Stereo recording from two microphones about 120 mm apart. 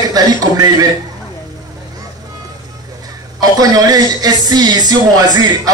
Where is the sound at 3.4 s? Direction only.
30° right (ahead or behind).